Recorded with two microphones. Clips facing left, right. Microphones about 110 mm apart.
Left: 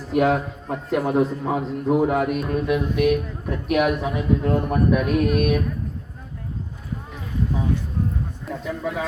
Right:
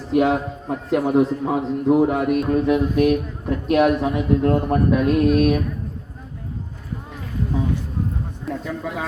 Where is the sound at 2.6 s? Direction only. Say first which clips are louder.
Even; 30° right (ahead or behind).